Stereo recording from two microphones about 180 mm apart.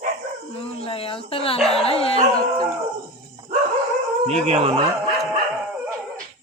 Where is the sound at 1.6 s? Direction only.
Centre (ahead or behind).